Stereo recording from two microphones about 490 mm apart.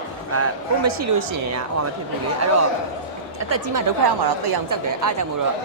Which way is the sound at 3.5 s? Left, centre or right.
Right.